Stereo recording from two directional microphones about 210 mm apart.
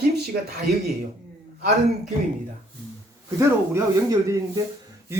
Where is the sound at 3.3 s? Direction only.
15° right (ahead or behind).